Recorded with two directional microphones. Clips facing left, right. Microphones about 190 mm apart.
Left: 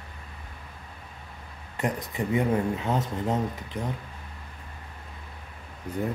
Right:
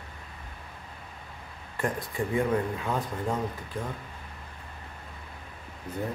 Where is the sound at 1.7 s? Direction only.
20° left (ahead or behind).